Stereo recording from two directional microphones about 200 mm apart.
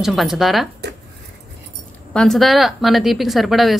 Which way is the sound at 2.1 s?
Centre (ahead or behind).